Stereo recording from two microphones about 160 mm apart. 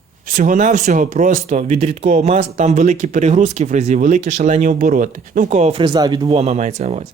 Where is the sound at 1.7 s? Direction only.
40° right (ahead or behind).